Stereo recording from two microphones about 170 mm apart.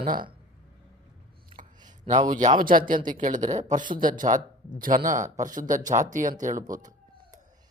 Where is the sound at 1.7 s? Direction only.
25° right (ahead or behind).